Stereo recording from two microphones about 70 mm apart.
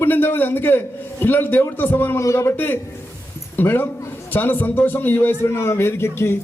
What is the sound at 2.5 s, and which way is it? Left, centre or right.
A man's voice, left.